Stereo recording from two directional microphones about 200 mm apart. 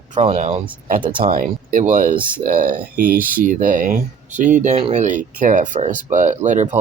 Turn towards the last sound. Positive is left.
turn(degrees=-35)  # may be behind; listen again after turning